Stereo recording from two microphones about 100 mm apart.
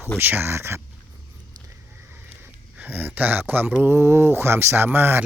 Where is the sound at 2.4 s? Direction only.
20° right (ahead or behind).